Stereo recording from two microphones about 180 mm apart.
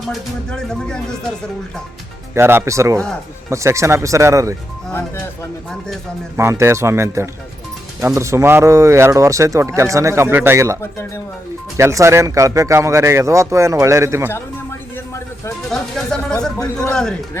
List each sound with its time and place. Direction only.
0.0 s speech: centre (ahead or behind)
2.3 s speech: 10° right (ahead or behind)
6.3 s speech: 15° right (ahead or behind)
11.8 s speech: 15° right (ahead or behind)
15.7 s speech: 5° left (ahead or behind)